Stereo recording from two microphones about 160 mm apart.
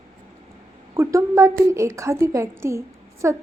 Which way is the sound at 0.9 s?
20° right (ahead or behind).